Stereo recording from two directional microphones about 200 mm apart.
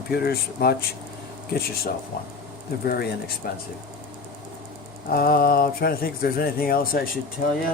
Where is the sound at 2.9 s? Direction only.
50° left (ahead or behind).